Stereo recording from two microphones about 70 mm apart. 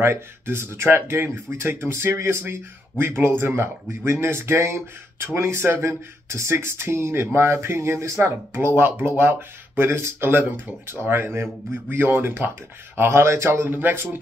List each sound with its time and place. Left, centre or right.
0.0 s speech: right